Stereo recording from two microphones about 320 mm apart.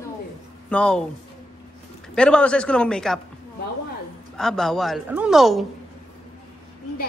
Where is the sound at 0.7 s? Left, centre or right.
Centre.